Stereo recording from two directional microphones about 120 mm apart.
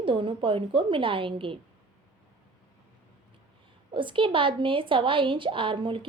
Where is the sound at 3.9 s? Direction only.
45° right (ahead or behind).